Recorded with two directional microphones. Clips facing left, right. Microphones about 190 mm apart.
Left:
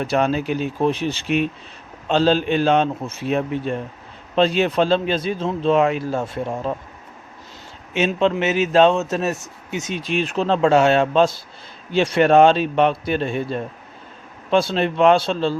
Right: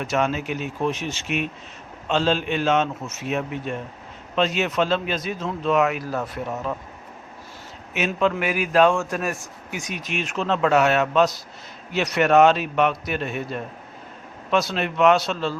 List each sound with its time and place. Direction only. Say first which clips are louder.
0.0 s a man's voice: left 4 dB; 35° left (ahead or behind)
7.9 s a man's voice: left 4 dB; 25° left (ahead or behind)